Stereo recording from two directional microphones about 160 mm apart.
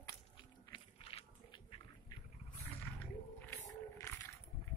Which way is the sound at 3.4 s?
15° left (ahead or behind).